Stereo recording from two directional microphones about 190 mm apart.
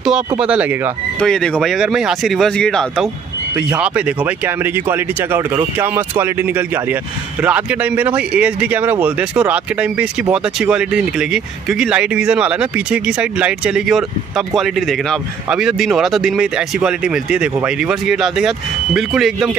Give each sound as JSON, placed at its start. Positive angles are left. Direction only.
{"t": 0.0, "sound": "speech", "side_deg": -5}
{"t": 1.2, "sound": "speech", "side_deg": 5}